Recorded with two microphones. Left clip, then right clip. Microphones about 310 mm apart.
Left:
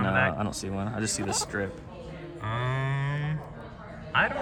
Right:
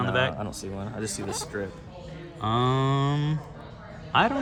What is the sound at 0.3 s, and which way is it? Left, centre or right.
Speech, left.